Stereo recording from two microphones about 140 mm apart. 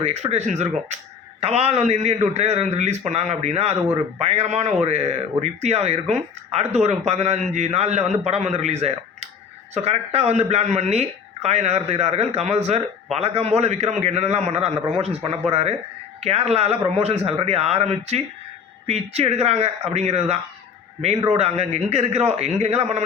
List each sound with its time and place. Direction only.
0.0 s speech: 50° right (ahead or behind)